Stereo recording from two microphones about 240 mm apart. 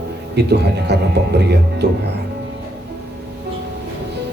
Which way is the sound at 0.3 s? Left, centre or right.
Right.